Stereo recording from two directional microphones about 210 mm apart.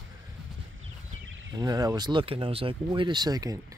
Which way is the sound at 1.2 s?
65° right (ahead or behind).